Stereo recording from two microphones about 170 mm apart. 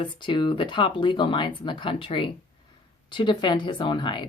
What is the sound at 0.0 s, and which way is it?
Speech, 30° left (ahead or behind).